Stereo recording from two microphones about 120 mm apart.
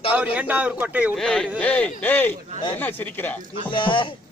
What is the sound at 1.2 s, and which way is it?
Speech, 5° left (ahead or behind).